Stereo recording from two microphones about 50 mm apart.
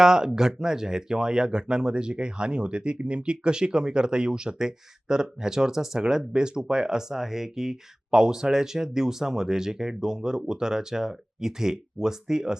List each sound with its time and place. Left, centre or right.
0.0 s speech: centre